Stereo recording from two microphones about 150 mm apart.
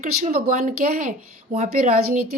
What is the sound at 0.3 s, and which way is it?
A woman's voice, 70° right (ahead or behind).